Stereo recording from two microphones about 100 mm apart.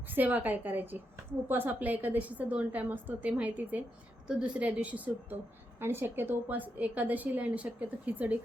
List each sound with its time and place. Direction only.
0.1 s a woman's voice: 15° right (ahead or behind)